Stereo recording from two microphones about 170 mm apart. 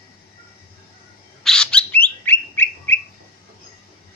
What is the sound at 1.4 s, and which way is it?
Bird, 5° left (ahead or behind).